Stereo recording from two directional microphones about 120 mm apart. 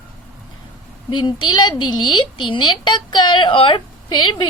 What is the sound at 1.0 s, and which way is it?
A woman's voice, 40° left (ahead or behind).